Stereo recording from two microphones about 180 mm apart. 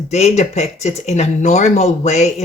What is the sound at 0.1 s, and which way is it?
Speech, 40° left (ahead or behind).